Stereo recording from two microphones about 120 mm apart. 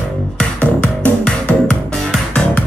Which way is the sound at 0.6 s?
10° left (ahead or behind).